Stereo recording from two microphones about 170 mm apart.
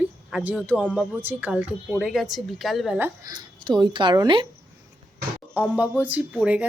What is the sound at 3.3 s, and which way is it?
Speech, 25° right (ahead or behind).